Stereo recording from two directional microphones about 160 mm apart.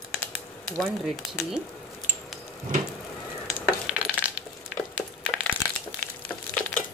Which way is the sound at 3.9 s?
5° right (ahead or behind).